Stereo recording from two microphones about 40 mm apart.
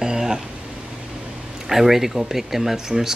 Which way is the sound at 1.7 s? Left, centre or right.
Centre.